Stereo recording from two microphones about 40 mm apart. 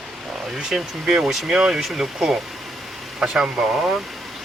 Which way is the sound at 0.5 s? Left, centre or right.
Centre.